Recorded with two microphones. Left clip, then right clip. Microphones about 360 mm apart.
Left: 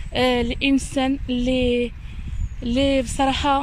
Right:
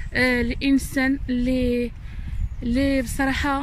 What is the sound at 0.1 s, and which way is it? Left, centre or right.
Speech, centre.